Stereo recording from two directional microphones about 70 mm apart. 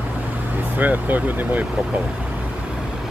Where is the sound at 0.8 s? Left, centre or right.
Right.